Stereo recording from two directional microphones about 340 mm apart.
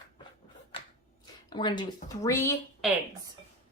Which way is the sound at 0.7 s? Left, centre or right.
Centre.